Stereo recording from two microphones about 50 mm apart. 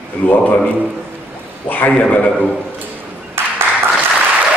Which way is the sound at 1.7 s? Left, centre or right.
Left.